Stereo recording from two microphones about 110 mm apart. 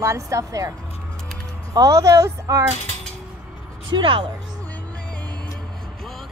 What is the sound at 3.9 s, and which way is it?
Speech, 50° right (ahead or behind).